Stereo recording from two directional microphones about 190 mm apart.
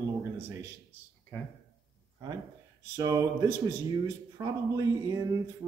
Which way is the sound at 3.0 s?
15° right (ahead or behind).